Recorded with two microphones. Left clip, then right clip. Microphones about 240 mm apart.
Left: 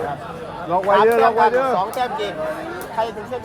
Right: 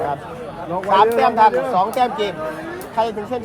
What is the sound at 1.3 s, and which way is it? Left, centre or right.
Speech, right.